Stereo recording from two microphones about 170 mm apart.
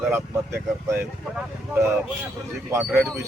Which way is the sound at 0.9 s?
10° right (ahead or behind).